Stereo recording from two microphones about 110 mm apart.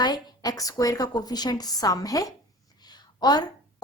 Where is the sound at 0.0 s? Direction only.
35° left (ahead or behind).